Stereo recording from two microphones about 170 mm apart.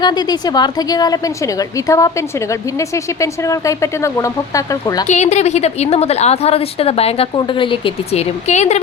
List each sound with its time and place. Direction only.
0.0 s a woman's voice: 25° left (ahead or behind)
5.0 s a woman's voice: 45° left (ahead or behind)